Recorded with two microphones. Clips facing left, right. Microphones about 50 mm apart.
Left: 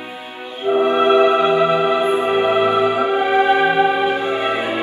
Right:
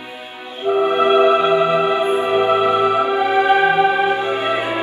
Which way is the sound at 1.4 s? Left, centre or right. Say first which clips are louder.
Even; left.